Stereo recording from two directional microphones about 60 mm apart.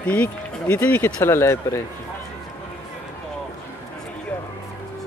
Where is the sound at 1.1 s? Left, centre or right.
Left.